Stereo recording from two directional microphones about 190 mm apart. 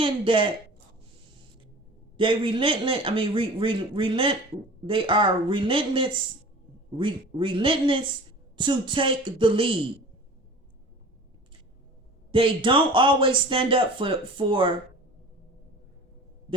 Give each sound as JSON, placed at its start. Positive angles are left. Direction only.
{"t": 0.0, "sound": "speech", "side_deg": -25}
{"t": 2.1, "sound": "speech", "side_deg": -25}
{"t": 12.3, "sound": "speech", "side_deg": -25}